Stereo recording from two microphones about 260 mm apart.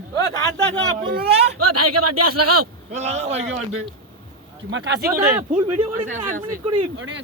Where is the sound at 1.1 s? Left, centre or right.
Right.